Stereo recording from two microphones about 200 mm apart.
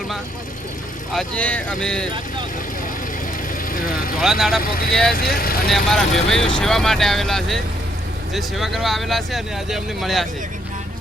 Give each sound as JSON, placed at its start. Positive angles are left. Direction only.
{"t": 1.1, "sound": "speech", "side_deg": 5}
{"t": 3.7, "sound": "speech", "side_deg": 45}
{"t": 4.2, "sound": "speech", "side_deg": 0}
{"t": 4.6, "sound": "speech", "side_deg": 45}
{"t": 5.6, "sound": "speech", "side_deg": 0}